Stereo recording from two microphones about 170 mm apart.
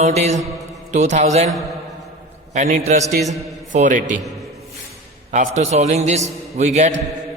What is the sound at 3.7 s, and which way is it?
Speech, 45° right (ahead or behind).